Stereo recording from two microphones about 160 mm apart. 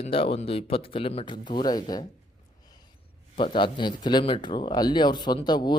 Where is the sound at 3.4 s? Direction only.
30° left (ahead or behind).